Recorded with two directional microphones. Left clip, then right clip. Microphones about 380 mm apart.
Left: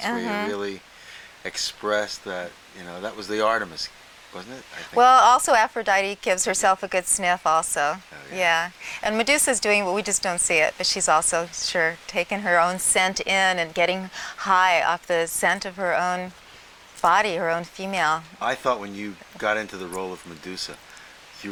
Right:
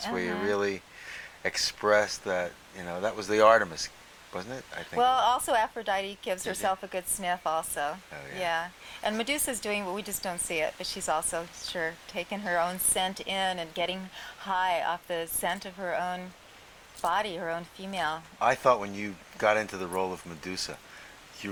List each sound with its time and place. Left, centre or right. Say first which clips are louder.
0.4 s speech: even; right
1.4 s speech: even; right
4.9 s a woman's voice: left 10 dB; left
18.3 s speech: even; right